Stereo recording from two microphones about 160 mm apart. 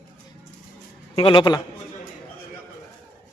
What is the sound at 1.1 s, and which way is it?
Speech, 35° left (ahead or behind).